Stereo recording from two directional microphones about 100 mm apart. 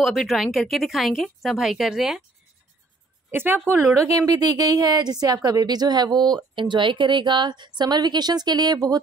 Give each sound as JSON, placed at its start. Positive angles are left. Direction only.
{"t": 0.0, "sound": "speech", "side_deg": 0}
{"t": 3.3, "sound": "a woman's voice", "side_deg": -20}
{"t": 4.3, "sound": "a woman's voice", "side_deg": -40}